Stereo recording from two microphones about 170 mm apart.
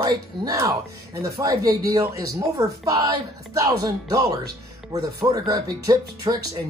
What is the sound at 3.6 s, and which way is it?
Speech, 20° right (ahead or behind).